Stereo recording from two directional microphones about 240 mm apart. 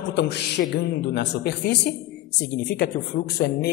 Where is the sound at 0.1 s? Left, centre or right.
Left.